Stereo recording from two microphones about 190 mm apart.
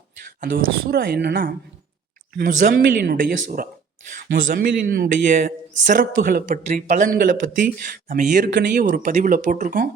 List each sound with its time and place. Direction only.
0.5 s speech: 55° right (ahead or behind)
8.4 s speech: 65° right (ahead or behind)
8.8 s speech: 45° right (ahead or behind)